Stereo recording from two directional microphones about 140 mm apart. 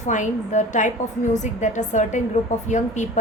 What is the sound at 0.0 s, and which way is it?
A woman's voice, 60° left (ahead or behind).